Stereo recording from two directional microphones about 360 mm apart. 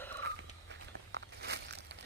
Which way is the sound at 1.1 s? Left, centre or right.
Right.